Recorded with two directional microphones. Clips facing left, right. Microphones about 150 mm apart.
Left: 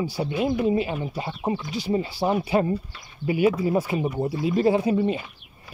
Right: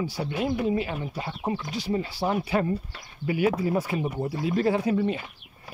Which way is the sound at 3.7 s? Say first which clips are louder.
Left 3 dB; 20° left (ahead or behind).